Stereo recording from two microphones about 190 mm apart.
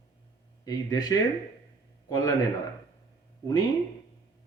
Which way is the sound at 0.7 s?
20° left (ahead or behind).